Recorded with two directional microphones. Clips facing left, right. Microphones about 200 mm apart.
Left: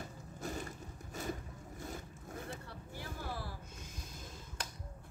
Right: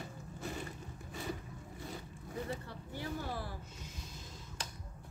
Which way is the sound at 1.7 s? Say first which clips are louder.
Left 1 dB; 45° left (ahead or behind).